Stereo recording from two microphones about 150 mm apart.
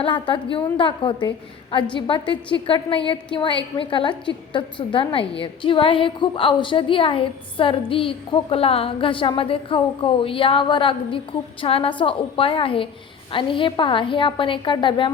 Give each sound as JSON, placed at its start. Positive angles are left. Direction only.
{"t": 0.0, "sound": "a woman's voice", "side_deg": 35}